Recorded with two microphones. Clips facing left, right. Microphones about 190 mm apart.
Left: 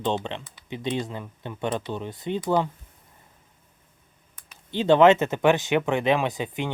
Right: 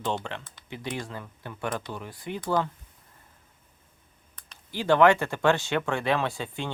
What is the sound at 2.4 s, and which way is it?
Speech, 10° left (ahead or behind).